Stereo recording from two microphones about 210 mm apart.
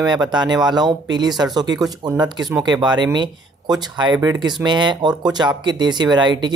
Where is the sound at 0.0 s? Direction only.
20° right (ahead or behind).